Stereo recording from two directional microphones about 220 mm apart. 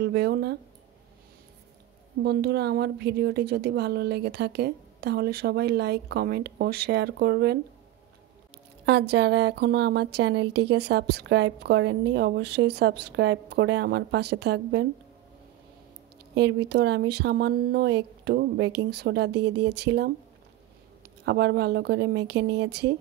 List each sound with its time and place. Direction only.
0.0 s speech: 50° right (ahead or behind)
2.2 s speech: 45° right (ahead or behind)
8.8 s speech: 50° right (ahead or behind)
16.3 s speech: 50° right (ahead or behind)
21.3 s speech: 50° right (ahead or behind)